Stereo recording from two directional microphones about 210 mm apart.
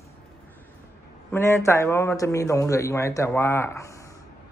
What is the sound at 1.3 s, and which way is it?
Speech, 10° left (ahead or behind).